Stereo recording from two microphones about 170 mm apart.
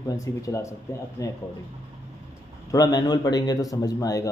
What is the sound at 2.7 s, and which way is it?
A man's voice, 20° left (ahead or behind).